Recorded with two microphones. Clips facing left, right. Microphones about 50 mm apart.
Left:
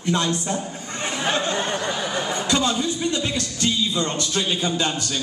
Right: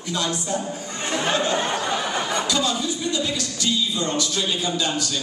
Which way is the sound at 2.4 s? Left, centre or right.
Left.